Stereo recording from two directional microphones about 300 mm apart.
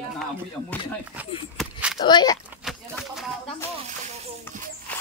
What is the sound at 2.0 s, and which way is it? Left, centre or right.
Speech, centre.